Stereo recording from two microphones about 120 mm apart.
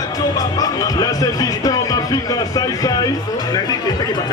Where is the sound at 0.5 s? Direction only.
30° left (ahead or behind).